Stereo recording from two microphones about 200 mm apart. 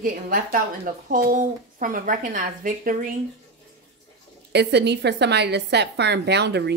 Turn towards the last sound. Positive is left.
turn(degrees=-55)  # may be behind; listen again after turning